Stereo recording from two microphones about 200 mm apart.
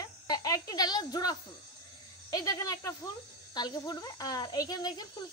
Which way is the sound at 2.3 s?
15° left (ahead or behind).